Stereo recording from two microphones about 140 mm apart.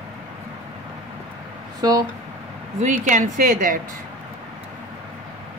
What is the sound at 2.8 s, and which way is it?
Speech, 60° right (ahead or behind).